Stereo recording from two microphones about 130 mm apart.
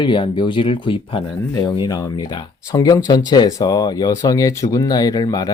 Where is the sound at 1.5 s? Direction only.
30° left (ahead or behind).